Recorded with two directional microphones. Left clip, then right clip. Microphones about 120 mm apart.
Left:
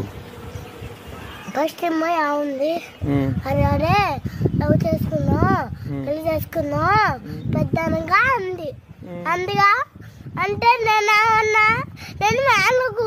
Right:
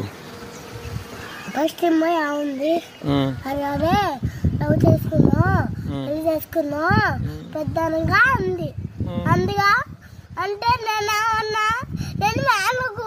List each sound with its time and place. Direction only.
1.5 s speech: 30° left (ahead or behind)
3.1 s speech: 5° left (ahead or behind)
3.4 s a sound: 40° left (ahead or behind)
5.3 s speech: 45° left (ahead or behind)